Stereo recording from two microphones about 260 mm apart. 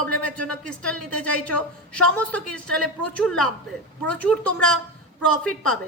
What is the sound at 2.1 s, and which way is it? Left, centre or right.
A woman's voice, centre.